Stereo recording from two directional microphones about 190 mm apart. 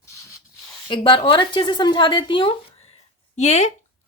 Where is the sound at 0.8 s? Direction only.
25° left (ahead or behind).